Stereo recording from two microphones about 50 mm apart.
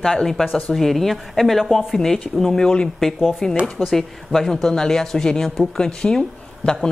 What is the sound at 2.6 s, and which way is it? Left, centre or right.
Speech, centre.